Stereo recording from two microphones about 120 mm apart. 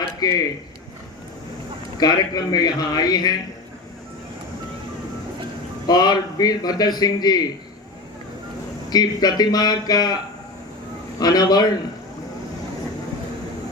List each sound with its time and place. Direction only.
0.2 s a man's voice: 35° left (ahead or behind)
2.0 s a man's voice: 35° left (ahead or behind)
5.8 s a man's voice: 35° left (ahead or behind)
8.9 s a man's voice: 35° left (ahead or behind)
11.2 s a man's voice: 35° left (ahead or behind)